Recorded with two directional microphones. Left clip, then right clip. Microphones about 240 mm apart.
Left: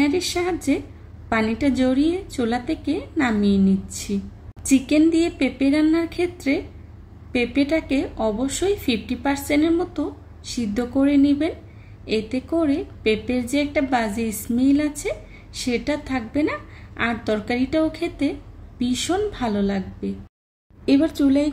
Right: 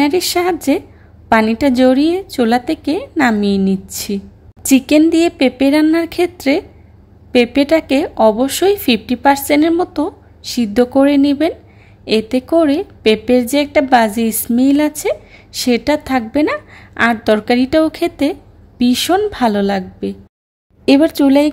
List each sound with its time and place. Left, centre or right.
0.0 s a woman's voice: right